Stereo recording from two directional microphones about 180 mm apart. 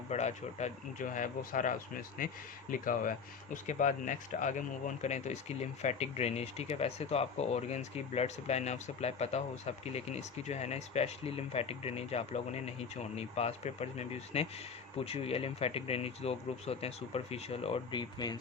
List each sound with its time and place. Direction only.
0.1 s speech: 40° left (ahead or behind); by 18.3 s 25° left (ahead or behind)